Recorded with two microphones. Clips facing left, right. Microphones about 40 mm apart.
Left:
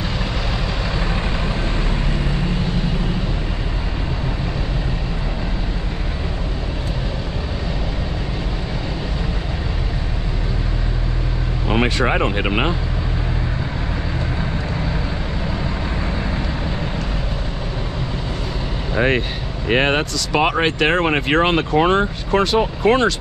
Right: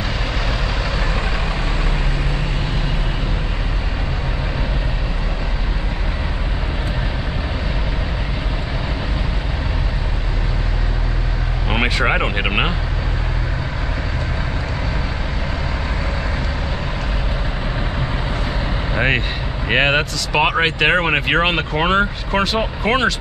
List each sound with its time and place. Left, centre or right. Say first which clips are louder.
11.7 s speech: even; centre
18.9 s speech: left 1 dB; centre